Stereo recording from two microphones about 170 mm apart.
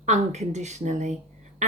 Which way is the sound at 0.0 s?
45° right (ahead or behind).